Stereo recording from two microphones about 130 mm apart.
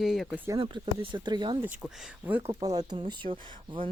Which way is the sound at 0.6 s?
40° right (ahead or behind).